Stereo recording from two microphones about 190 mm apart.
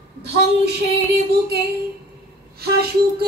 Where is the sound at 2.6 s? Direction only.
55° right (ahead or behind).